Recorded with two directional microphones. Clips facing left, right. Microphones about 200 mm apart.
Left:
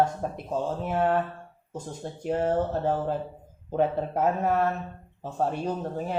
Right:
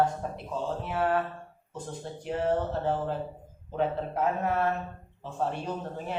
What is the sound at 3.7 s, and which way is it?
Speech, 45° left (ahead or behind).